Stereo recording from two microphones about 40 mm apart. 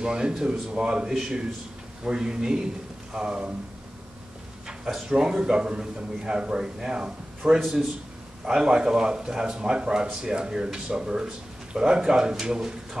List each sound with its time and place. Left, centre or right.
0.0 s speech: centre
4.8 s speech: centre